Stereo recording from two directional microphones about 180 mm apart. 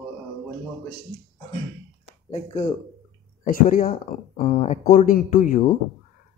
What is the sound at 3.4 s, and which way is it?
Speech, 50° left (ahead or behind).